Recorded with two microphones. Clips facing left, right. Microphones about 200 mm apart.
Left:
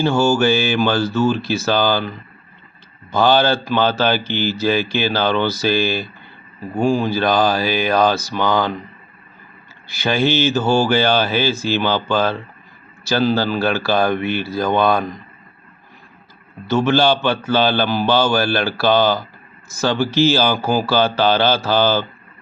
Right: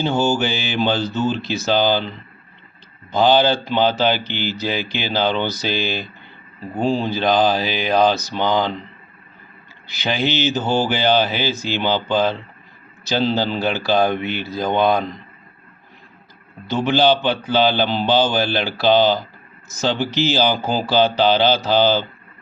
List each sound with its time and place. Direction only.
0.0 s speech: 20° right (ahead or behind)
9.8 s speech: 20° right (ahead or behind)
16.6 s speech: 15° right (ahead or behind)